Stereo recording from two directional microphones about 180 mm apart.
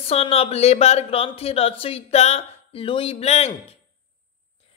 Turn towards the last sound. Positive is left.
turn(degrees=35)  # may be behind; listen again after turning